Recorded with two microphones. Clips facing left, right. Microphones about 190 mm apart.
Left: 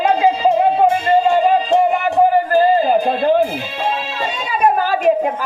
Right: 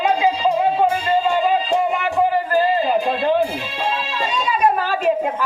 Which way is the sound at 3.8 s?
55° left (ahead or behind).